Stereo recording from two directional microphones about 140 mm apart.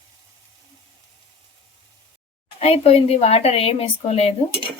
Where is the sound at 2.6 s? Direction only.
45° left (ahead or behind).